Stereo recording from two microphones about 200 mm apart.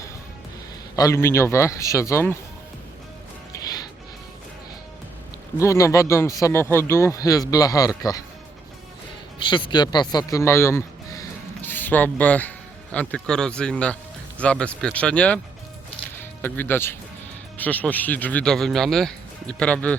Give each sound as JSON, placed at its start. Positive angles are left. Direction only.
{"t": 0.9, "sound": "speech", "side_deg": 15}
{"t": 5.5, "sound": "speech", "side_deg": 15}
{"t": 9.4, "sound": "speech", "side_deg": 25}